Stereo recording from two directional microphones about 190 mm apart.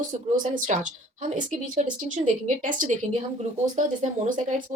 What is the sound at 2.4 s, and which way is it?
Speech, 45° right (ahead or behind).